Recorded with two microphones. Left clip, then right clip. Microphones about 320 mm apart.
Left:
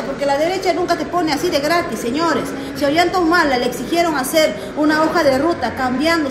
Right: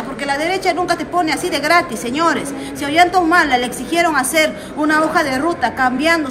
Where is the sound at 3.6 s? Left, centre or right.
Centre.